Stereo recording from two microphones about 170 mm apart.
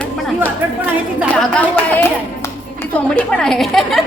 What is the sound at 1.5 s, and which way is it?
A woman's voice, 10° left (ahead or behind).